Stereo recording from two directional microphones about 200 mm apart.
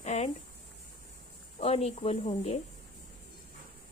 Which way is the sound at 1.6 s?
30° left (ahead or behind).